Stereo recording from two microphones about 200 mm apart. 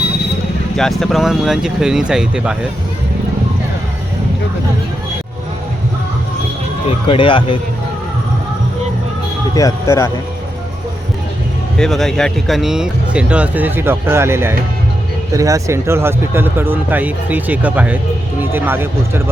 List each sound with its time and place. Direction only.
0.8 s speech: centre (ahead or behind)
7.1 s speech: 25° left (ahead or behind)
9.6 s speech: 15° left (ahead or behind)
11.8 s speech: centre (ahead or behind)